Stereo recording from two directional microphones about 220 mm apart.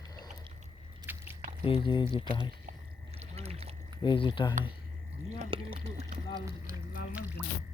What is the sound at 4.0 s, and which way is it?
Speech, 20° left (ahead or behind).